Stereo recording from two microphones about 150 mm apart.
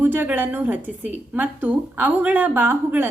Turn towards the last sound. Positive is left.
turn(degrees=-10)  # may be behind; listen again after turning